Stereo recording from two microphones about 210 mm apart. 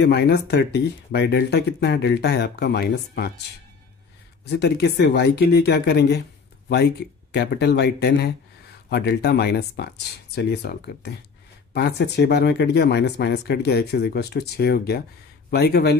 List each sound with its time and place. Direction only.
0.0 s speech: 50° left (ahead or behind)
4.5 s speech: 50° left (ahead or behind)